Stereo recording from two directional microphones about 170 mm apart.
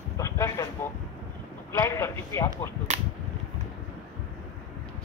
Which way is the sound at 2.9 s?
40° right (ahead or behind).